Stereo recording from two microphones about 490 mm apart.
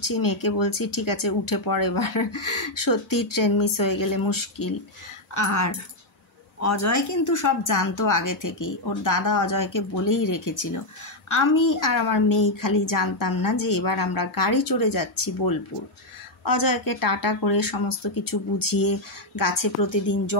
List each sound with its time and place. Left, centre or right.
0.0 s speech: left